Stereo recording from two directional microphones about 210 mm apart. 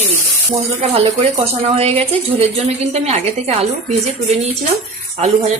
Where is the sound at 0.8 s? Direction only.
30° right (ahead or behind).